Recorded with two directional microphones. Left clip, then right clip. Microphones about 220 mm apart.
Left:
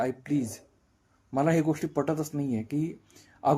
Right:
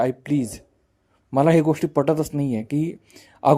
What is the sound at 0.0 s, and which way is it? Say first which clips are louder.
A man's voice: right 7 dB; 40° right (ahead or behind).